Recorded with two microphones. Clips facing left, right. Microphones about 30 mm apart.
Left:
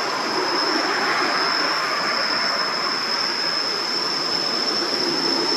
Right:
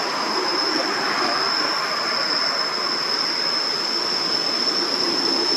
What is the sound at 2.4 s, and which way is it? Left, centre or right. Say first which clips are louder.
Vehicle: left 1 dB; centre.